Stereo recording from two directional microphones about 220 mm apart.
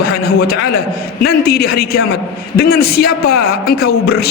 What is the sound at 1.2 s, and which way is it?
A man's voice, 45° left (ahead or behind).